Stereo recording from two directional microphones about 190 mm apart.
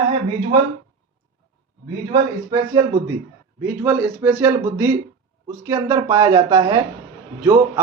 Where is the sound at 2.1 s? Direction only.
20° right (ahead or behind).